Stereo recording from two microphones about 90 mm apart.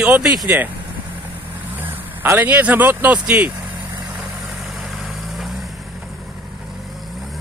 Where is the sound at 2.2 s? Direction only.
20° right (ahead or behind).